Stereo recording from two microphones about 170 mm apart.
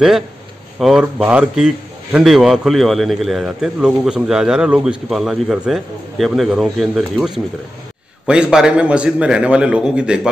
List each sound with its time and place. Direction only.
0.7 s a man's voice: centre (ahead or behind)